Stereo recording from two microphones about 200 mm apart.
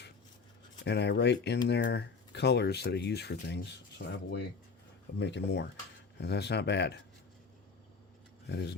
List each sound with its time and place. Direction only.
0.9 s speech: 60° left (ahead or behind)
8.4 s speech: 60° left (ahead or behind)